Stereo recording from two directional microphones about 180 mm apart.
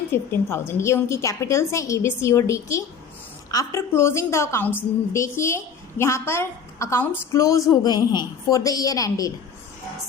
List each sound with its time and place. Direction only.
0.1 s a woman's voice: 15° left (ahead or behind)